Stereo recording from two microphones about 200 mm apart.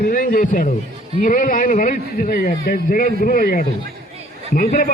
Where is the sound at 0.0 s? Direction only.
40° left (ahead or behind).